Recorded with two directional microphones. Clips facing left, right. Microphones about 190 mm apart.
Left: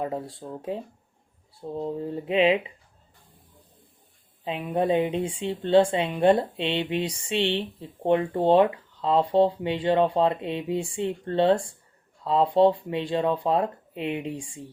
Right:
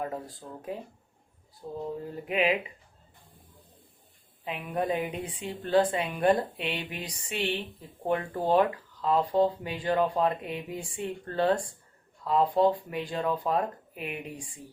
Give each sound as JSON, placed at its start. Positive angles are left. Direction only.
{"t": 0.0, "sound": "speech", "side_deg": 25}
{"t": 4.4, "sound": "speech", "side_deg": 30}